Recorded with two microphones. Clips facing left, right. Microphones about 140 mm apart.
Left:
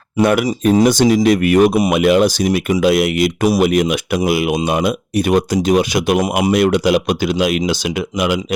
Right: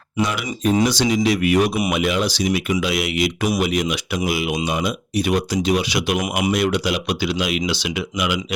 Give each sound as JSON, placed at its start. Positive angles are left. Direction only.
{"t": 0.2, "sound": "speech", "side_deg": 55}
{"t": 0.7, "sound": "speech", "side_deg": 45}